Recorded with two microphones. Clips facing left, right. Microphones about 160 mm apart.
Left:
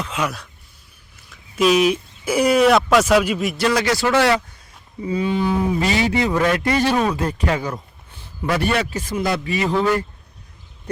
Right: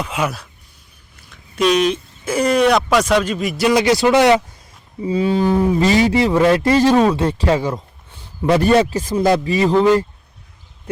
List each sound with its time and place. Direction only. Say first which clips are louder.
0.0 s speech: right 3 dB; 10° right (ahead or behind)
3.6 s speech: right 6 dB; 15° right (ahead or behind)
5.0 s a man's voice: right 4 dB; 30° right (ahead or behind)